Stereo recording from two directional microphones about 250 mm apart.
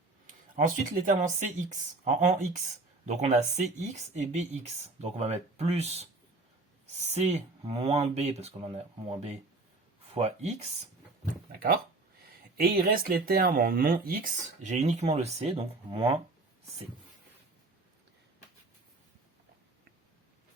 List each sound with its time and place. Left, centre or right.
0.5 s speech: right
3.1 s speech: right
7.1 s speech: right
12.5 s speech: right